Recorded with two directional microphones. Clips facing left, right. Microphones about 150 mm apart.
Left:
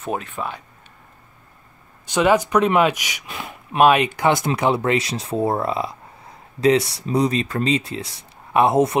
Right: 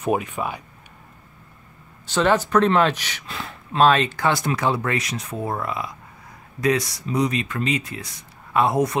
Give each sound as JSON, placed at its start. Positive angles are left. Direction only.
{"t": 0.0, "sound": "speech", "side_deg": -10}
{"t": 2.0, "sound": "speech", "side_deg": 15}